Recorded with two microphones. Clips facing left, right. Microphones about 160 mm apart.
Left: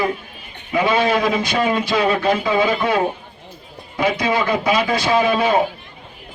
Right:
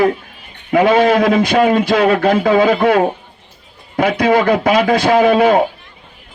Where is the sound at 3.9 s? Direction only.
60° right (ahead or behind).